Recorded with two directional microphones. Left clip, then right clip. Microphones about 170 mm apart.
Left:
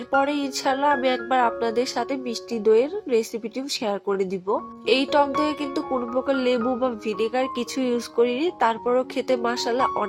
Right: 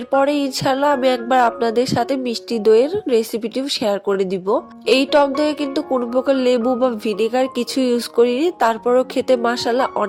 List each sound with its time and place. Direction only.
0.1 s speech: 35° right (ahead or behind)